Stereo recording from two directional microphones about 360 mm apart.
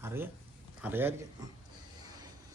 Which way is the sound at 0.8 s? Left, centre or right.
Centre.